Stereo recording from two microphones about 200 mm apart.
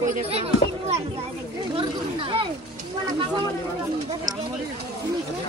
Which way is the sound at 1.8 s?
25° right (ahead or behind).